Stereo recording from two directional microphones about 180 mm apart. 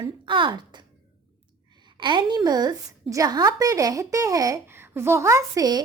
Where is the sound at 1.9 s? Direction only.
25° right (ahead or behind).